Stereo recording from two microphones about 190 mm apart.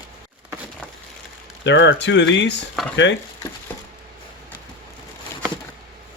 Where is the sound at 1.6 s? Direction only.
70° left (ahead or behind).